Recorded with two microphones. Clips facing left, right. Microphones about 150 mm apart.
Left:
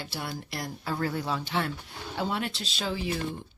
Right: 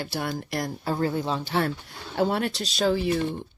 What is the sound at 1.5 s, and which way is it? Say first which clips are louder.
Speech: right 5 dB; 40° right (ahead or behind).